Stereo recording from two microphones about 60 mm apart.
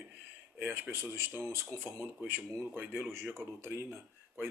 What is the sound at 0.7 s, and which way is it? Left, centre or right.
Speech, right.